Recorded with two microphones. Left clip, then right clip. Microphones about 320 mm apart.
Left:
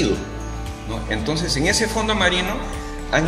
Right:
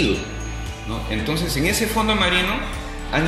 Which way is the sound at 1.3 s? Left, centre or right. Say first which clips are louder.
Left 2 dB; left.